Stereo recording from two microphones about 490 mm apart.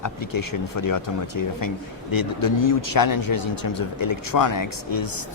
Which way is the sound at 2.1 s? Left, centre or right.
Left.